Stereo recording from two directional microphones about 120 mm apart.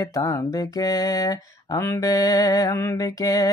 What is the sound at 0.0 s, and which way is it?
Speech, 25° left (ahead or behind).